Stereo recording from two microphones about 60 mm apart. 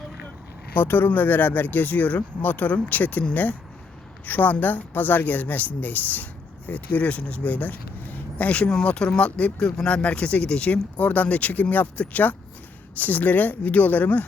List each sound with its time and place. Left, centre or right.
0.8 s speech: left
4.3 s speech: left